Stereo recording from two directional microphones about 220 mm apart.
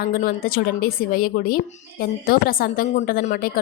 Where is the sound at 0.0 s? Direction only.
40° left (ahead or behind).